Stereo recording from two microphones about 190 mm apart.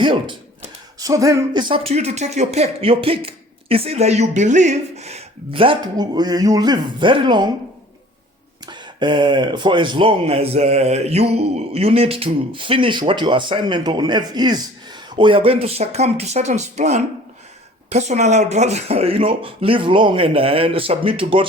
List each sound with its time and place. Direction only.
0.0 s speech: 25° right (ahead or behind)
1.9 s speech: 35° right (ahead or behind)
8.6 s speech: 25° right (ahead or behind)